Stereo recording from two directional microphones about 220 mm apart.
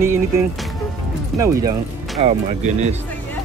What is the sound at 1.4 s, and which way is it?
Speech, 15° right (ahead or behind).